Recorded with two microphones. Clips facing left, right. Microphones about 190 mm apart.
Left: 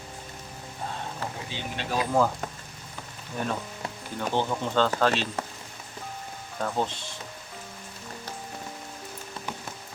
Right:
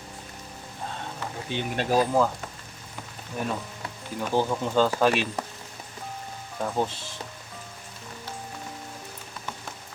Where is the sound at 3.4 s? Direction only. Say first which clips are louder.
Even; 5° right (ahead or behind).